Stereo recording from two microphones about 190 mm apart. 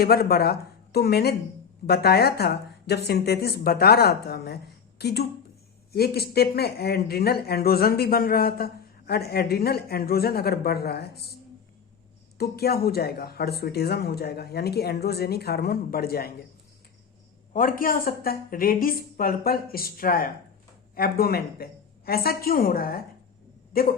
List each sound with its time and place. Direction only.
0.0 s speech: 55° left (ahead or behind)
12.4 s speech: 55° left (ahead or behind)
17.5 s a woman's voice: 45° left (ahead or behind)